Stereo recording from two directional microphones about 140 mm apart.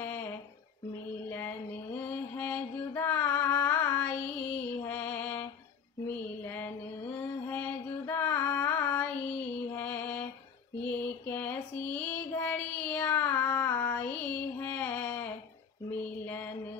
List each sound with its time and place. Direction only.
0.0 s a sound: 15° left (ahead or behind)
2.0 s music: 10° left (ahead or behind)
6.0 s a sound: 15° left (ahead or behind)
7.2 s music: 10° left (ahead or behind)
9.7 s mantra: 10° left (ahead or behind)
10.8 s child singing: 10° left (ahead or behind)
15.9 s music: 15° left (ahead or behind)